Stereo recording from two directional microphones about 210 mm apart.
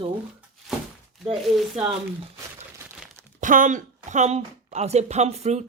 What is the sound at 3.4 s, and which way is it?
Speech, 40° right (ahead or behind).